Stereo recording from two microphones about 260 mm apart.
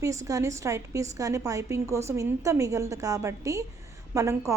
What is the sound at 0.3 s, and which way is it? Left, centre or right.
A woman's voice, centre.